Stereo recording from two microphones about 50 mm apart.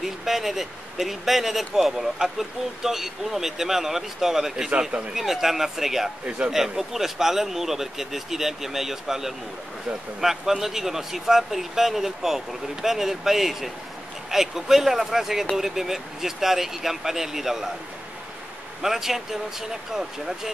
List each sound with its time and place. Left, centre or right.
0.0 s speech: centre
4.6 s a man's voice: right
5.1 s speech: centre
6.2 s a man's voice: right
6.8 s speech: centre
18.8 s speech: centre